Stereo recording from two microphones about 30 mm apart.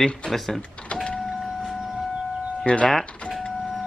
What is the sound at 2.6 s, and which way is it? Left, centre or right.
Speech, left.